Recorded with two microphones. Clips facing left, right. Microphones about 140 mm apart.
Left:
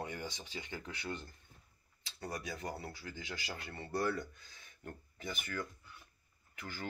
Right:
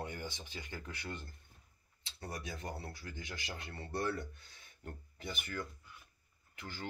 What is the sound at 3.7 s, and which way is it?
Speech, 25° left (ahead or behind).